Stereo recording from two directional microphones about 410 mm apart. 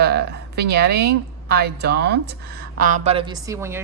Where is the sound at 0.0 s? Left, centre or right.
Right.